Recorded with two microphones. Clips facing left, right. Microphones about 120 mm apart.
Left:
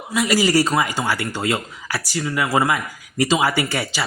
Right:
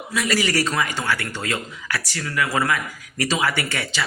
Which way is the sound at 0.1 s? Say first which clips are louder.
Left 5 dB; 25° left (ahead or behind).